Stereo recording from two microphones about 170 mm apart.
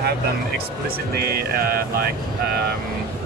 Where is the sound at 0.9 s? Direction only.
65° right (ahead or behind).